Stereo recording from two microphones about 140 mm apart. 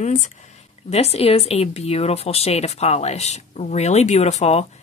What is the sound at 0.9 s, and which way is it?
Speech, 45° left (ahead or behind).